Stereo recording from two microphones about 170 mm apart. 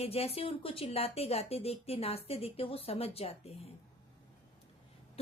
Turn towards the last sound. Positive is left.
turn(degrees=35)  # may be behind; listen again after turning